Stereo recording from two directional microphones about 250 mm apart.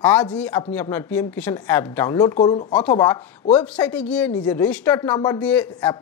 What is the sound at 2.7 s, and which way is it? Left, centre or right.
Speech, centre.